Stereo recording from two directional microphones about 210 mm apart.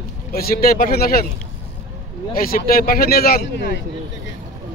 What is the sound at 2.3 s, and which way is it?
Speech, 45° left (ahead or behind).